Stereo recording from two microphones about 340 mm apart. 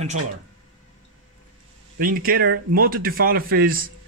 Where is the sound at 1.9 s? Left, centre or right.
Right.